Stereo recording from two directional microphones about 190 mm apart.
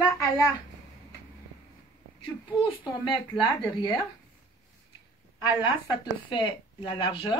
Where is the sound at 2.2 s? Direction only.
25° left (ahead or behind).